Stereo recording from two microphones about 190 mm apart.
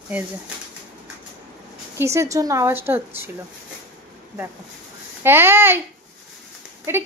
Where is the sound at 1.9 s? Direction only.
15° right (ahead or behind).